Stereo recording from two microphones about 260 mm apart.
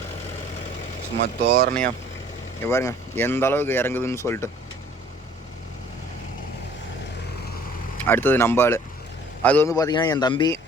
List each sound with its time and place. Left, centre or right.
1.2 s speech: right
2.6 s speech: centre
7.9 s speech: centre